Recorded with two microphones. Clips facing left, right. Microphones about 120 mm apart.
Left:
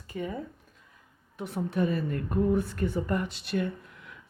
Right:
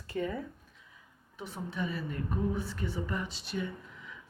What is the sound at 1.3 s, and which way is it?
A woman's voice, 60° left (ahead or behind).